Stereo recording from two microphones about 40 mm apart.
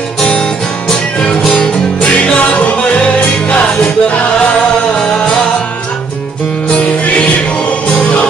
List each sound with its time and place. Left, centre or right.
0.3 s music: left
2.0 s music: left